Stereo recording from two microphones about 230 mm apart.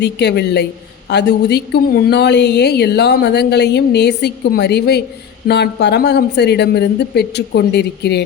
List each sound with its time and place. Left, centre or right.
0.0 s a woman's voice: left